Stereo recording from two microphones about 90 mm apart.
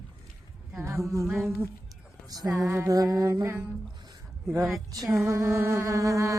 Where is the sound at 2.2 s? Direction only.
45° right (ahead or behind).